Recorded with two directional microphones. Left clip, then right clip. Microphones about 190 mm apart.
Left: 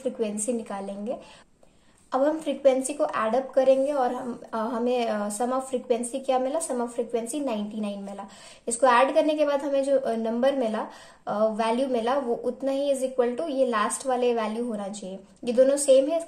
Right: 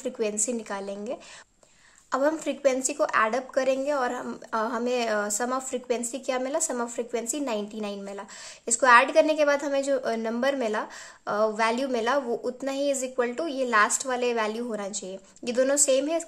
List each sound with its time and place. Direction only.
0.0 s a woman's voice: 20° right (ahead or behind)